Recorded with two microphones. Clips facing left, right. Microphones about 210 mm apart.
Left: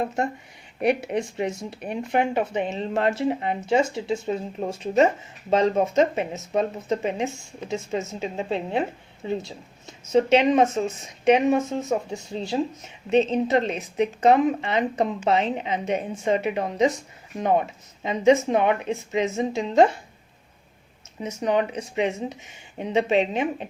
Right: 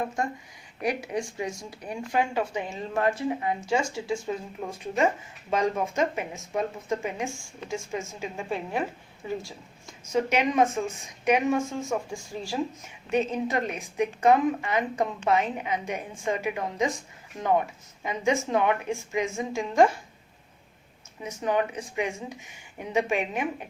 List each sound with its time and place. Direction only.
0.8 s speech: 65° left (ahead or behind)
1.9 s a woman's voice: 20° left (ahead or behind)
21.4 s a woman's voice: 20° left (ahead or behind)